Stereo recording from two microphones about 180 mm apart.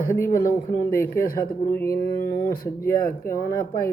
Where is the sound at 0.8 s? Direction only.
55° left (ahead or behind).